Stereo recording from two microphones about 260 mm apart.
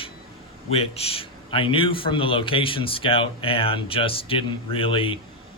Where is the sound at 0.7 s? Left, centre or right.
Left.